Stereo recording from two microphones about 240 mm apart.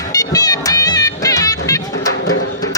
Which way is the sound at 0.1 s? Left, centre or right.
Centre.